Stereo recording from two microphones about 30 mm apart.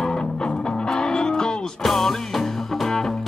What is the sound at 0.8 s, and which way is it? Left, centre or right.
Music, left.